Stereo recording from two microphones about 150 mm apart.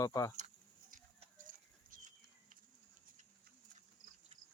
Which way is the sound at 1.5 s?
60° right (ahead or behind).